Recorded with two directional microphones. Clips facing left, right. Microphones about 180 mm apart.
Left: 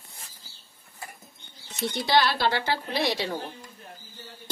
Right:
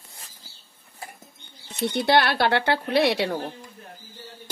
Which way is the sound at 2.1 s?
60° right (ahead or behind).